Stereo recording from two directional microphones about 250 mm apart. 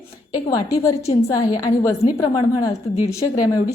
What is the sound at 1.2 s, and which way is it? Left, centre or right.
A woman's voice, centre.